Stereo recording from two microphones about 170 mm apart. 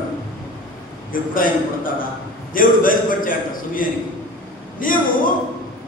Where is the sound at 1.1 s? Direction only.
55° left (ahead or behind).